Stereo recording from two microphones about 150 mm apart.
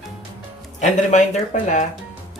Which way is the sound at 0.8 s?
50° left (ahead or behind).